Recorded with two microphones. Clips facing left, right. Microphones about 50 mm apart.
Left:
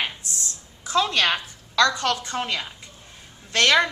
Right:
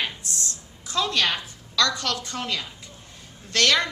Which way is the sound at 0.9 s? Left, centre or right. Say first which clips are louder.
Left 4 dB; left.